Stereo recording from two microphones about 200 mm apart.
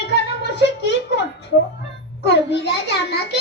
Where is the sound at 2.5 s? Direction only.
60° left (ahead or behind).